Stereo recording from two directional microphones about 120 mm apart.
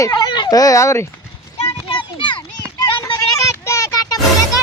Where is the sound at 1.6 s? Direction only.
45° left (ahead or behind).